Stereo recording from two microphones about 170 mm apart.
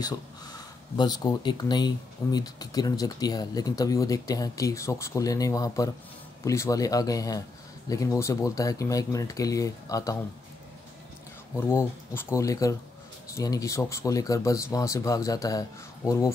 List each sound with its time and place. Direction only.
0.0 s speech: 25° left (ahead or behind)
11.5 s speech: 15° left (ahead or behind)